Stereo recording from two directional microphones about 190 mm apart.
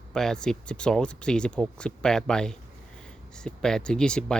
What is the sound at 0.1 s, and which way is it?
Speech, 5° left (ahead or behind).